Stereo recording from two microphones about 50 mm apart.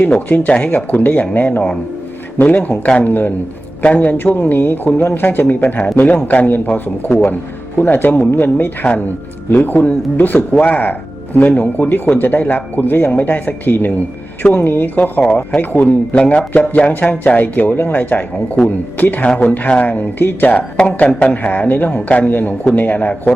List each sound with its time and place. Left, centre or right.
0.0 s speech: left
3.1 s speech: left
3.8 s speech: left
4.4 s a man's voice: left
6.7 s a man's voice: left
8.8 s speech: left
16.1 s speech: left
20.7 s speech: left
22.3 s speech: left